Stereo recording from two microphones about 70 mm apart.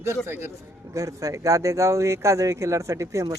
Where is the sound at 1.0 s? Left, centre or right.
Right.